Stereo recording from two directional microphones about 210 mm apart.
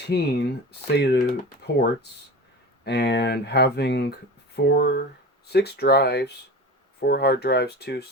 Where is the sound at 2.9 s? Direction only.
55° left (ahead or behind).